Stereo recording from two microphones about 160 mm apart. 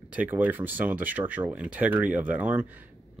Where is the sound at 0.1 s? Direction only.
10° right (ahead or behind).